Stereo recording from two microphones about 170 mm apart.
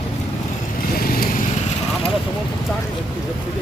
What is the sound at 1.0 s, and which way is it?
Vehicle, 60° left (ahead or behind).